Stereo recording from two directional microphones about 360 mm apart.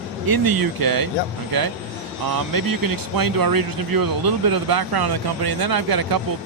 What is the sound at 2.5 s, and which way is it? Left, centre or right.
Speech, right.